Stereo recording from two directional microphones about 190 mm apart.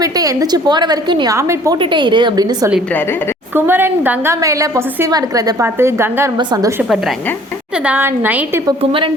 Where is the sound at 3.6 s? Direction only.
10° right (ahead or behind).